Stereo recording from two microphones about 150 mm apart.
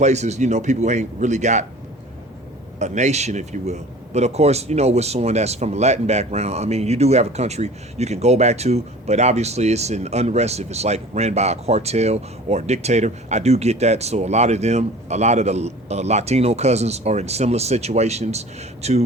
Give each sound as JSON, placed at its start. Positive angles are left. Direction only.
{"t": 0.0, "sound": "speech", "side_deg": -50}
{"t": 2.7, "sound": "speech", "side_deg": -50}